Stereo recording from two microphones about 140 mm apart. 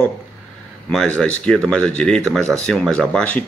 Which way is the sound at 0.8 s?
10° left (ahead or behind).